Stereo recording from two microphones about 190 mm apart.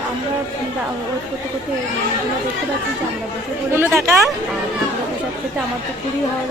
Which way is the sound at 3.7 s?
15° right (ahead or behind).